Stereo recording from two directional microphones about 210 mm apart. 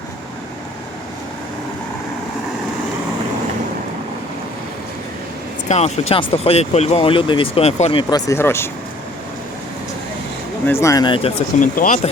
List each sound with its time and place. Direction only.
5.6 s speech: 30° left (ahead or behind)
8.3 s speech: 10° left (ahead or behind)
10.7 s speech: 15° left (ahead or behind)
11.6 s speech: 40° left (ahead or behind)